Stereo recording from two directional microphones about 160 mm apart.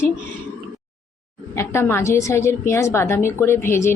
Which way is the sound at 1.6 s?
15° left (ahead or behind).